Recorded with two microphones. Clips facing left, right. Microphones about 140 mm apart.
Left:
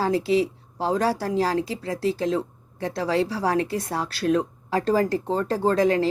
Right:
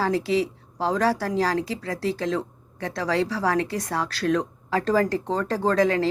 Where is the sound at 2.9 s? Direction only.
25° left (ahead or behind).